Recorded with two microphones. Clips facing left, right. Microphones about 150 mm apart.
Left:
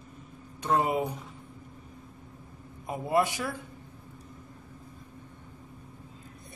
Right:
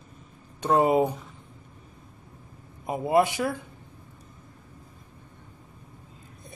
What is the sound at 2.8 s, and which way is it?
Speech, 20° right (ahead or behind).